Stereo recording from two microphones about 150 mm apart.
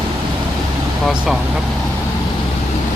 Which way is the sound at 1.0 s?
Centre (ahead or behind).